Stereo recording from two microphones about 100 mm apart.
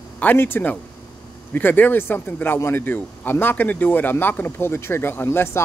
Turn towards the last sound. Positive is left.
turn(degrees=25)  # may be behind; listen again after turning